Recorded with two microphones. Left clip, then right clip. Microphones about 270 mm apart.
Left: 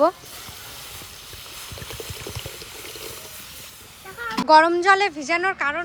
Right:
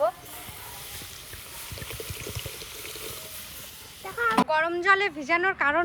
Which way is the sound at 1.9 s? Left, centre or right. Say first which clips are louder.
Left 3 dB; centre.